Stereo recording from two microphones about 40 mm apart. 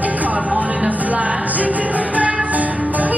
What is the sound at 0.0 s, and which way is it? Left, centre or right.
Music, right.